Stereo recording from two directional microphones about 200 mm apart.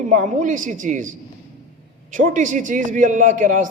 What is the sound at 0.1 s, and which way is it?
A man's voice, 40° right (ahead or behind).